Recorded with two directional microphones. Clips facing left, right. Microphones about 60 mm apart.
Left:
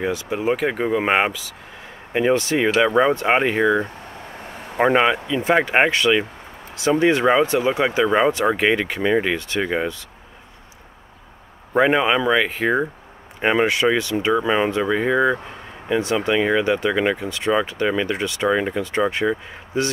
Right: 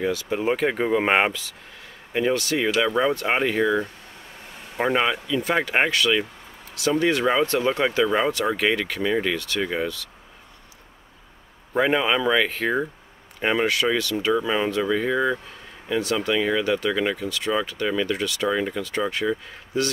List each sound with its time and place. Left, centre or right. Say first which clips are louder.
0.0 s speech: left 1 dB; left
0.3 s speech: left 2 dB; centre
1.8 s speech: left 3 dB; left
11.7 s speech: left 4 dB; centre
13.4 s speech: left 4 dB; left